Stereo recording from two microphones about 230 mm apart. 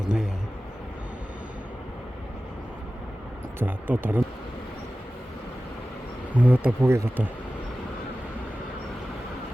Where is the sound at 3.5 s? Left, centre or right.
Centre.